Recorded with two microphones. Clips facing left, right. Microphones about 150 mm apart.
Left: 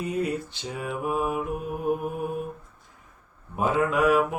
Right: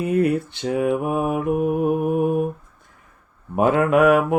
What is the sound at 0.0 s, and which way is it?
Mantra, 60° right (ahead or behind).